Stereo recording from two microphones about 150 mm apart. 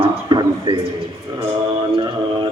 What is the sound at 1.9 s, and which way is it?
Music, 30° right (ahead or behind).